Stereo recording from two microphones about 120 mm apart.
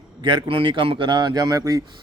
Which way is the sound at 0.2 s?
45° right (ahead or behind).